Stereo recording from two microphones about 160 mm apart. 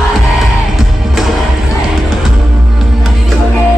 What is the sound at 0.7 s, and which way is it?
Music, centre (ahead or behind).